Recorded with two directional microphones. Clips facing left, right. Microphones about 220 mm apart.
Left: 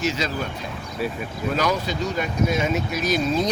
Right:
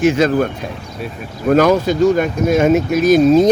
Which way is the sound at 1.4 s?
50° right (ahead or behind).